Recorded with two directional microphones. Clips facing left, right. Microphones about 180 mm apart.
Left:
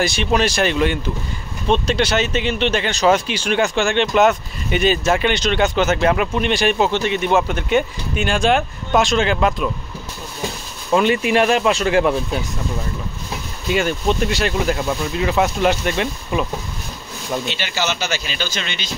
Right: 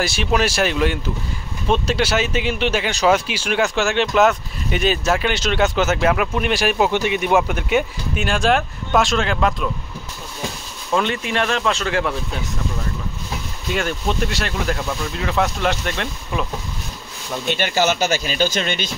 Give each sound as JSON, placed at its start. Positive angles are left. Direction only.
{"t": 0.0, "sound": "speech", "side_deg": -5}
{"t": 11.0, "sound": "speech", "side_deg": 10}
{"t": 13.7, "sound": "speech", "side_deg": 0}
{"t": 17.5, "sound": "speech", "side_deg": -50}